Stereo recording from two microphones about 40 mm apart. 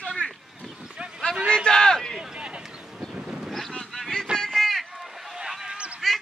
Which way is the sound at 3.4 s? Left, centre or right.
Centre.